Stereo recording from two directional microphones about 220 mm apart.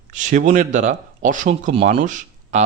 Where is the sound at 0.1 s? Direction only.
35° right (ahead or behind).